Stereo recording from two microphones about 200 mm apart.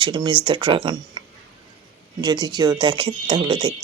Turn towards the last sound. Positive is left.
turn(degrees=-25)  # may be behind; listen again after turning